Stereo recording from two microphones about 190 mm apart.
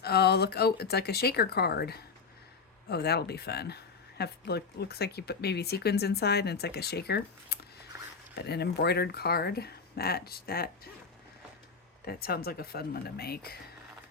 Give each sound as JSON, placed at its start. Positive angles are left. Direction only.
{"t": 0.0, "sound": "speech", "side_deg": 55}
{"t": 12.0, "sound": "speech", "side_deg": 55}